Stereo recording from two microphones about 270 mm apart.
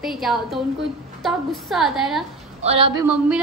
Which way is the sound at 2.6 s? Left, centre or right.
Centre.